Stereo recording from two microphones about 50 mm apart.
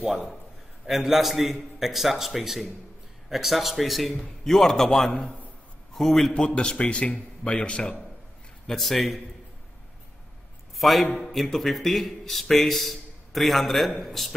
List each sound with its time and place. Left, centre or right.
0.8 s a man's voice: centre
5.1 s a man's voice: left
5.9 s a man's voice: centre
6.4 s a man's voice: centre
8.6 s speech: centre
10.8 s a man's voice: centre